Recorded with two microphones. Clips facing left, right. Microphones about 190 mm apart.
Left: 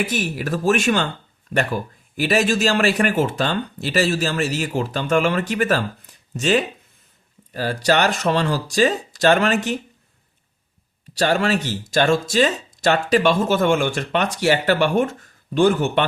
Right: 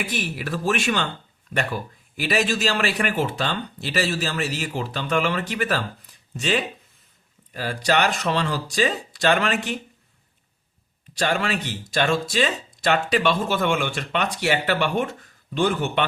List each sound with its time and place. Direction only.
0.0 s a man's voice: 45° left (ahead or behind)
11.2 s a man's voice: 40° left (ahead or behind)